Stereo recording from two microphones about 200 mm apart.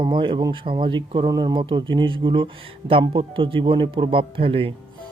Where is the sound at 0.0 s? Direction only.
25° right (ahead or behind).